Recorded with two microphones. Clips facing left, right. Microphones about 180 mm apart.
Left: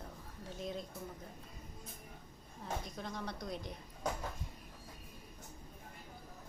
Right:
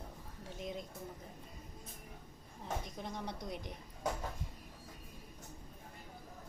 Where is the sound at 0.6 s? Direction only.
15° right (ahead or behind).